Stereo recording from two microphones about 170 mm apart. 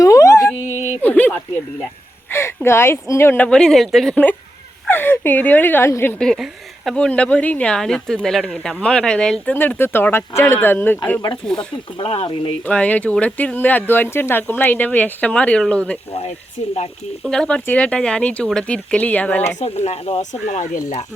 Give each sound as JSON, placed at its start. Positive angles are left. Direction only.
{"t": 0.0, "sound": "dog", "side_deg": 20}
{"t": 1.0, "sound": "a sound", "side_deg": 10}
{"t": 2.6, "sound": "speech", "side_deg": 15}
{"t": 11.9, "sound": "speech", "side_deg": 35}
{"t": 12.6, "sound": "speech", "side_deg": 10}
{"t": 17.2, "sound": "speech", "side_deg": 5}
{"t": 19.5, "sound": "speech", "side_deg": 40}